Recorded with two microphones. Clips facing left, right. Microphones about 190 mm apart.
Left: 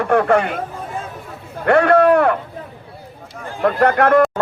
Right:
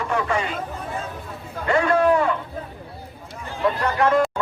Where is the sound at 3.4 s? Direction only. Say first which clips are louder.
Left 7 dB; 55° left (ahead or behind).